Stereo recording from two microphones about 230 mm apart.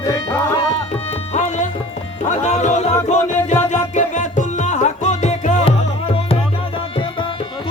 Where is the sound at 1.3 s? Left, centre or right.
Left.